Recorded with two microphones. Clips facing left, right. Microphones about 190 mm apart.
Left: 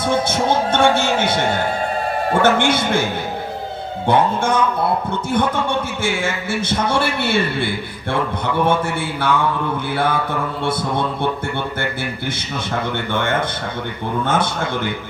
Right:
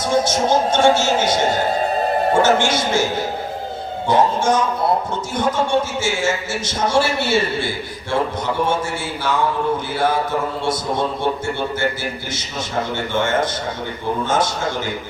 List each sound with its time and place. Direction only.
0.0 s a man's voice: 60° left (ahead or behind)
9.2 s a man's voice: 60° left (ahead or behind)
13.1 s a man's voice: 60° left (ahead or behind)